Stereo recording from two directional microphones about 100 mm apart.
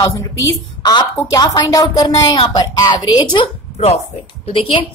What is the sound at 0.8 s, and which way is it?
A woman's voice, 40° left (ahead or behind).